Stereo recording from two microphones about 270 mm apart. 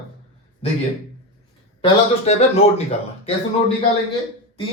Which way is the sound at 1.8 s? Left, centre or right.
Left.